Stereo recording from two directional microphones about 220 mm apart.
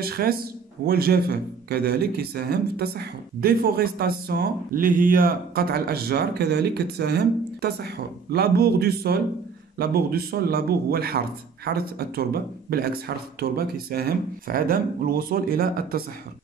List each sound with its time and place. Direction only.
0.0 s speech: 45° right (ahead or behind)